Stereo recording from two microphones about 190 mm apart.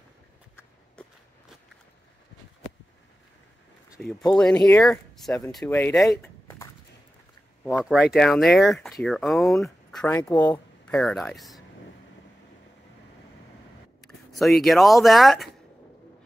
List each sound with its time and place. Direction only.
1.0 s walk: 5° left (ahead or behind)
4.0 s speech: 5° left (ahead or behind)
6.0 s a sound: 15° left (ahead or behind)
7.8 s speech: centre (ahead or behind); by 10.5 s 20° left (ahead or behind)
10.5 s speech: 5° left (ahead or behind)
14.0 s speech: centre (ahead or behind)